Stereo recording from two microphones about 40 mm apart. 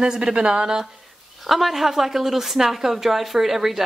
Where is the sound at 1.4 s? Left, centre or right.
Centre.